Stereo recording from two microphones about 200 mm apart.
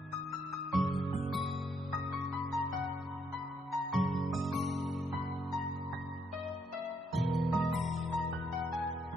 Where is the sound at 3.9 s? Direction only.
Centre (ahead or behind).